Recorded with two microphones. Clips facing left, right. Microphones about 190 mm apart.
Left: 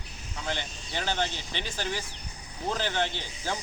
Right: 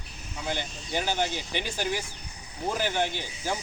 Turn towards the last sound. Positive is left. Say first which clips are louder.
# right 2 dB
turn(degrees=-10)  # may be behind; listen again after turning